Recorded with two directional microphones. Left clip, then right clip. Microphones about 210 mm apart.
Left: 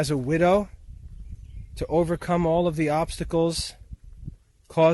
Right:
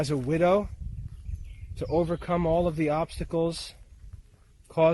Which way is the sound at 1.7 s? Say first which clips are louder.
Left 3 dB; 45° left (ahead or behind).